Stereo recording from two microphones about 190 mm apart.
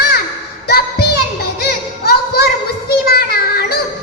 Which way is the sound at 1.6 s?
55° left (ahead or behind).